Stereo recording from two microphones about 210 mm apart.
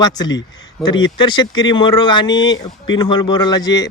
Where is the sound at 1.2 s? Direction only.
20° left (ahead or behind).